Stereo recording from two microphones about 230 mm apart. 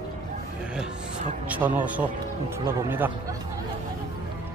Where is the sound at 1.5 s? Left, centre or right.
Centre.